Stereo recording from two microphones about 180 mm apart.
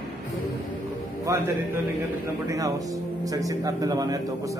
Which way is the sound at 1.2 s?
20° right (ahead or behind).